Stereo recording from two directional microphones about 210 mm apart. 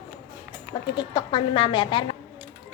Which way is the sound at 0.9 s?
20° left (ahead or behind).